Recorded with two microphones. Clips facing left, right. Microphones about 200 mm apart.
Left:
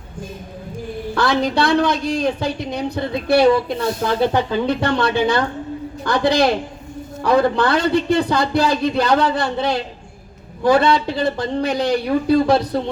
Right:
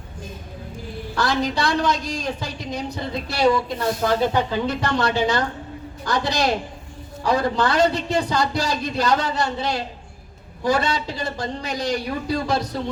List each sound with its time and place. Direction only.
1.1 s a man's voice: 60° left (ahead or behind)